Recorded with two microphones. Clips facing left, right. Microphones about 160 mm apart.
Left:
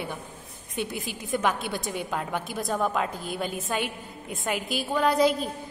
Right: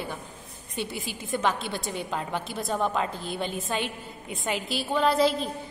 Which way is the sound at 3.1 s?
50° left (ahead or behind).